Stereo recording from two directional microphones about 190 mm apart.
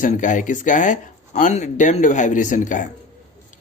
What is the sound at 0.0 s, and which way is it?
Speech, 40° left (ahead or behind).